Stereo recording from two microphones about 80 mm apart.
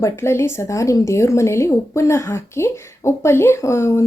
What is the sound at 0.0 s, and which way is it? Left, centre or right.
Speech, left.